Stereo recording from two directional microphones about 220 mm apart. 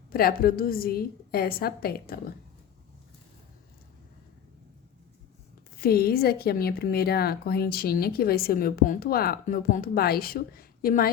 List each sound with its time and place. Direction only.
0.1 s speech: 40° left (ahead or behind)
5.7 s speech: 45° left (ahead or behind)